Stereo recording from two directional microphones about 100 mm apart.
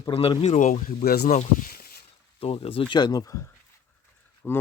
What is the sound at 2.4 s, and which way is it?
Speech, 70° left (ahead or behind).